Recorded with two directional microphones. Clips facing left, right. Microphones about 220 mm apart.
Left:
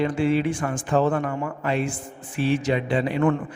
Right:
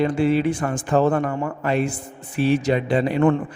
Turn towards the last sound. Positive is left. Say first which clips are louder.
# right 3 dB
turn(degrees=-35)  # may be behind; listen again after turning